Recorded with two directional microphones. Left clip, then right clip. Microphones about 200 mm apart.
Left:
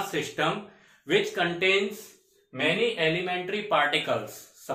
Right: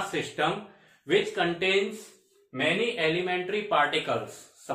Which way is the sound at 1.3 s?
20° left (ahead or behind).